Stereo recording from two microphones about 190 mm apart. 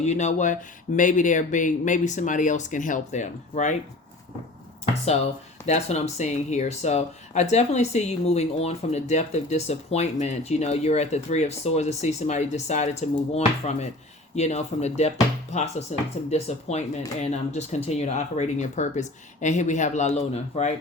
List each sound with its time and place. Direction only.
0.0 s speech: 35° left (ahead or behind)
5.6 s speech: 35° left (ahead or behind)